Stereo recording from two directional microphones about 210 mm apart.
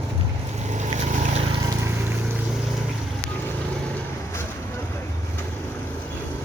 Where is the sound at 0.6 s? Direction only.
35° right (ahead or behind).